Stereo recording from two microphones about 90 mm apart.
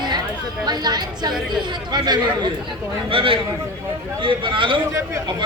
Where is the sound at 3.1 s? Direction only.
80° right.